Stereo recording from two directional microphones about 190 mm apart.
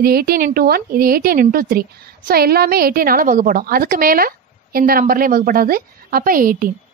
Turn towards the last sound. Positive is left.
turn(degrees=-50)  # may be behind; listen again after turning